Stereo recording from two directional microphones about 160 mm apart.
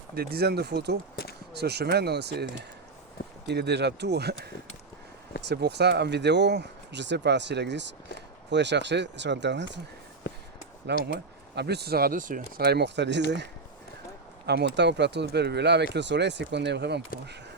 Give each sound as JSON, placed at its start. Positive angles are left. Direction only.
{"t": 0.1, "sound": "speech", "side_deg": -75}
{"t": 1.1, "sound": "a sound", "side_deg": 70}
{"t": 1.5, "sound": "speech", "side_deg": -90}
{"t": 11.0, "sound": "speech", "side_deg": -90}